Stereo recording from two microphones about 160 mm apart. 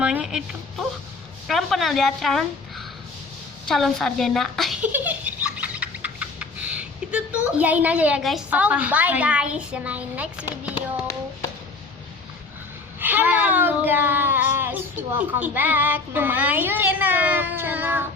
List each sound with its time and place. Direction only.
0.0 s a woman's voice: 5° right (ahead or behind)
4.9 s laughter: 10° right (ahead or behind)
13.0 s speech: 10° right (ahead or behind)